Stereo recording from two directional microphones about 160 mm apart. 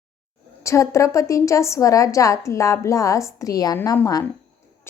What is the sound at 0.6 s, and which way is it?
A woman's voice, 20° left (ahead or behind).